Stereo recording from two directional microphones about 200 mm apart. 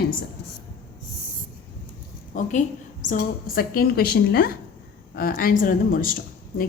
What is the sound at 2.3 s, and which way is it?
A woman's voice, 40° left (ahead or behind).